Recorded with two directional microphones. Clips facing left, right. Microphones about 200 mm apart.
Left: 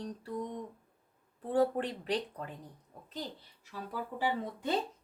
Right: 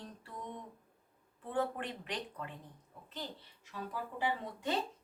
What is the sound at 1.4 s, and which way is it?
Speech, 35° left (ahead or behind).